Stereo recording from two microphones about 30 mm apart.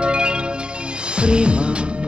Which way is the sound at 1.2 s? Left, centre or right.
Right.